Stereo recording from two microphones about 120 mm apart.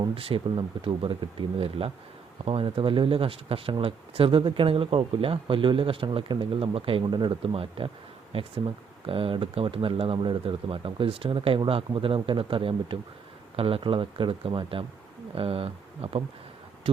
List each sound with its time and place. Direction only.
0.1 s speech: 50° right (ahead or behind)